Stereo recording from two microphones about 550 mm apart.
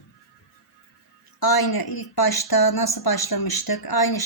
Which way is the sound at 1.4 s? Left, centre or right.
Left.